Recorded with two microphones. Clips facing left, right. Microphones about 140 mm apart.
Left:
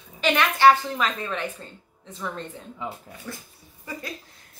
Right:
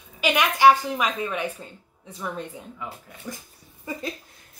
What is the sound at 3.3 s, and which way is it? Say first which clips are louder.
Speech: right 2 dB; 15° right (ahead or behind).